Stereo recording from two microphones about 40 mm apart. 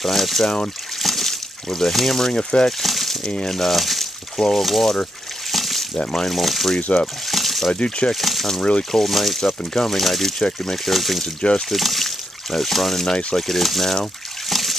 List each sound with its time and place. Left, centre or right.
0.0 s speech: centre
2.8 s a sound: centre
3.4 s speech: centre
5.5 s a sound: centre
5.9 s speech: centre
6.3 s speech: centre
6.9 s speech: left
7.2 s water: centre
7.7 s speech: left
8.1 s speech: centre
10.9 s speech: centre
14.5 s trickle: centre